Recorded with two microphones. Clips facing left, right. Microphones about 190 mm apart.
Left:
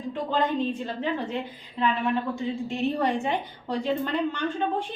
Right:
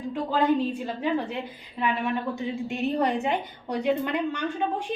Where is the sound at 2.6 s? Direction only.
15° right (ahead or behind).